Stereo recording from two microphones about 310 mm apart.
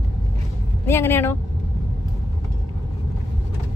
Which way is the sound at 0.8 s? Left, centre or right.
Centre.